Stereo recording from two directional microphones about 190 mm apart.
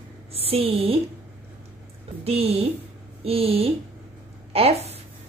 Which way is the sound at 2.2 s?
30° right (ahead or behind).